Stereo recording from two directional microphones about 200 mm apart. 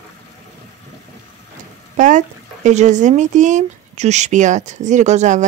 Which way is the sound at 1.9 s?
40° right (ahead or behind).